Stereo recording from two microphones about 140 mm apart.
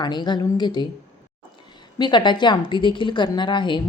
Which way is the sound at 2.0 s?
35° left (ahead or behind).